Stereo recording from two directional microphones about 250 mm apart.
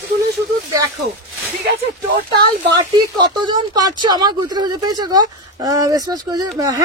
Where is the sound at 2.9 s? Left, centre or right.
Centre.